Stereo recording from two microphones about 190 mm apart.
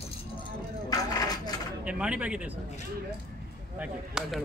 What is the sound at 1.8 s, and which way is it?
Speech, 5° right (ahead or behind).